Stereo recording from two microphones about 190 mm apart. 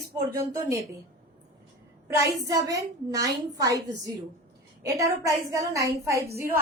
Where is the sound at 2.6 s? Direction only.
20° right (ahead or behind).